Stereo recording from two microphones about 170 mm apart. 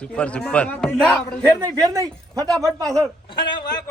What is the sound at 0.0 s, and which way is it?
A man's voice, 5° left (ahead or behind).